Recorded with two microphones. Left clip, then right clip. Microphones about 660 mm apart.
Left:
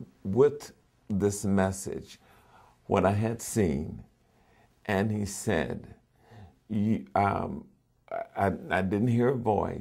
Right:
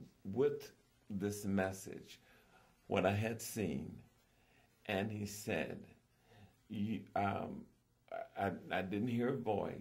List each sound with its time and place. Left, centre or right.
0.3 s speech: left
4.8 s speech: left